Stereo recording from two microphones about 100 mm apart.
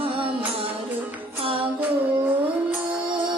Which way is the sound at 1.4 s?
70° right (ahead or behind).